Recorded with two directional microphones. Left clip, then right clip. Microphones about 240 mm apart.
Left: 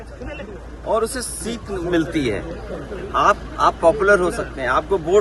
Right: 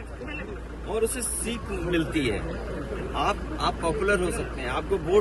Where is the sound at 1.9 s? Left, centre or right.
Left.